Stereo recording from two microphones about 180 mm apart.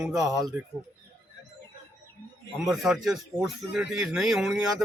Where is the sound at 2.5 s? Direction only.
Centre (ahead or behind).